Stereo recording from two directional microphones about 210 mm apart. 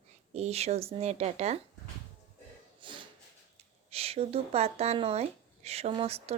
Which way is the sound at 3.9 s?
30° right (ahead or behind).